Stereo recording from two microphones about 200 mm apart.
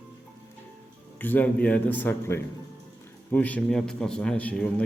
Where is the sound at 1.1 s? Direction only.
10° left (ahead or behind).